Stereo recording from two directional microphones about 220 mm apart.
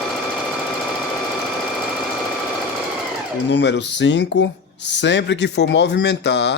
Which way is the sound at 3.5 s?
55° left (ahead or behind).